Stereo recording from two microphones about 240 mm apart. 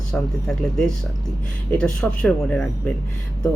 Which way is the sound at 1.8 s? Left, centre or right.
Centre.